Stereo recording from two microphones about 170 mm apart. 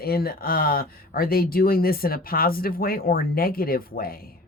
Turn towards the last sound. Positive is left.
turn(degrees=60)  # may be behind; listen again after turning